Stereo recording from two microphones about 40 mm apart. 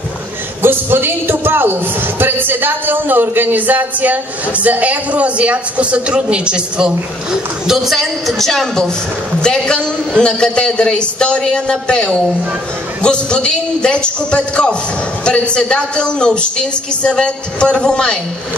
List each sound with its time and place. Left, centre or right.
0.6 s a man's voice: right
7.6 s a woman's voice: centre